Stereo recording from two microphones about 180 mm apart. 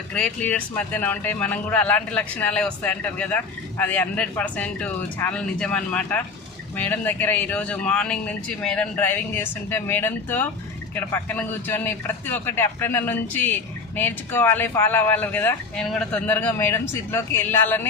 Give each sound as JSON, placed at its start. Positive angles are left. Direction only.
{"t": 0.1, "sound": "a man's voice", "side_deg": 5}